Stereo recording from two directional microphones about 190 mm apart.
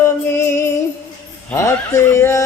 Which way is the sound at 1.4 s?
15° left (ahead or behind).